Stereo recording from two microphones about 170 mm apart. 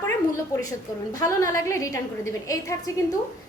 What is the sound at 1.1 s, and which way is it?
A woman's voice, 20° left (ahead or behind).